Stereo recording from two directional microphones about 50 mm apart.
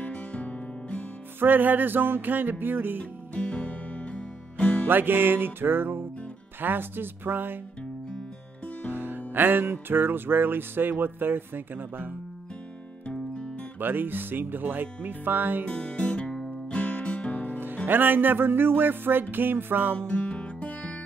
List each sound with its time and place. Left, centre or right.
0.0 s music: left
1.4 s music: right
3.0 s music: left
4.8 s music: right
8.9 s music: right
13.7 s music: right
15.6 s music: left
17.8 s music: right
20.0 s music: left